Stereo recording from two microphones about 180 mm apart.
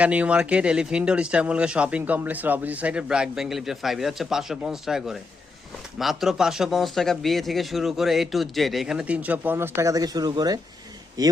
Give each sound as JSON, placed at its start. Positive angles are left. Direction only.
{"t": 0.0, "sound": "speech", "side_deg": -5}